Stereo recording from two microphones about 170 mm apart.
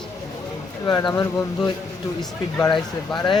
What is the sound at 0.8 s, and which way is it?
Speech, 25° left (ahead or behind).